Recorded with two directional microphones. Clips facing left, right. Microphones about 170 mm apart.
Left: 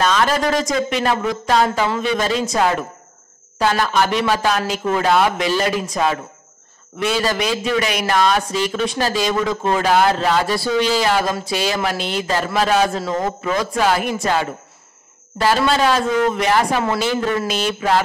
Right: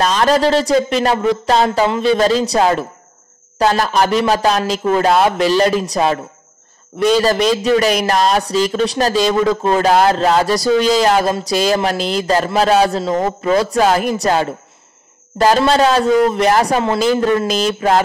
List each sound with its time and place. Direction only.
0.0 s speech: 35° right (ahead or behind)
7.2 s speech: 35° right (ahead or behind)